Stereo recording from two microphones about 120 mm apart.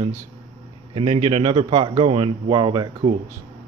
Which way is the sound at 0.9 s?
60° right (ahead or behind).